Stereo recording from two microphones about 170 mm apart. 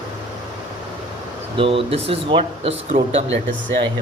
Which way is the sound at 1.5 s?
30° right (ahead or behind).